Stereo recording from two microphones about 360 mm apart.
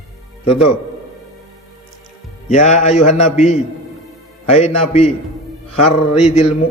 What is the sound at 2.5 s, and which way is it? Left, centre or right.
A man's voice, centre.